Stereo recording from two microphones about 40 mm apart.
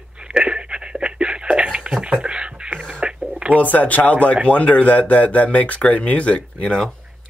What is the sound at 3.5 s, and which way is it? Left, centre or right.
Speech, left.